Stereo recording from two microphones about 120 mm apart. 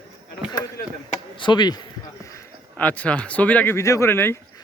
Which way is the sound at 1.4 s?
40° left (ahead or behind).